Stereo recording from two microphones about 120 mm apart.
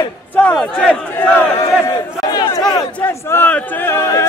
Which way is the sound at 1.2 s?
15° left (ahead or behind).